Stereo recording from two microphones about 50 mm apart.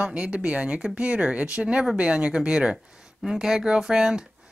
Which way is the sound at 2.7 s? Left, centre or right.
Centre.